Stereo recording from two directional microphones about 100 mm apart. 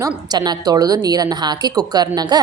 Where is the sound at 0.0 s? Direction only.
40° right (ahead or behind).